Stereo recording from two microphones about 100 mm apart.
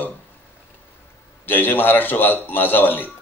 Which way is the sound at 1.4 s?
20° left (ahead or behind).